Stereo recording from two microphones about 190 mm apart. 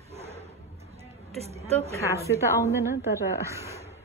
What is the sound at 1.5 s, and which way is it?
Speech, 35° right (ahead or behind).